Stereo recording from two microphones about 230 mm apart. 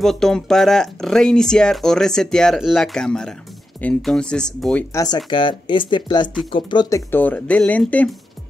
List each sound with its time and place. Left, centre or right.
0.0 s speech: centre
4.9 s speech: centre